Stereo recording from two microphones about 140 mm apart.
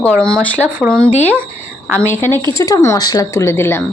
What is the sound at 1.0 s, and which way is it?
Speech, 50° left (ahead or behind).